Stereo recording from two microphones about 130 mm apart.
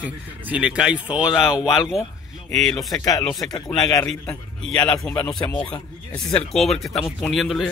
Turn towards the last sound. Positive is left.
turn(degrees=0)  # may be behind; listen again after turning